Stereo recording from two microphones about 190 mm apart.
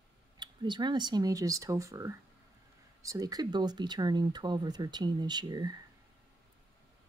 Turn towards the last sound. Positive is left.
turn(degrees=-20)  # may be behind; listen again after turning